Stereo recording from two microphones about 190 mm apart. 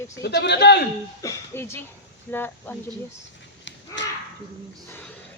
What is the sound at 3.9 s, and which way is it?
Crow, 70° left (ahead or behind).